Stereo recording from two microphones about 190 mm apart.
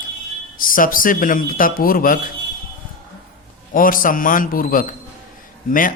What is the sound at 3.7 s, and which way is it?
A man's voice, 45° left (ahead or behind).